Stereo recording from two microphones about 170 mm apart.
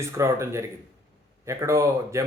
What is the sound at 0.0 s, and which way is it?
Speech, 15° right (ahead or behind).